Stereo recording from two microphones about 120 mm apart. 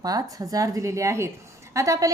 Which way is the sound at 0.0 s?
30° right (ahead or behind).